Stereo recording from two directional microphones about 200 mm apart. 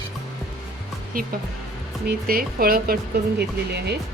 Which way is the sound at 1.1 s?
45° right (ahead or behind).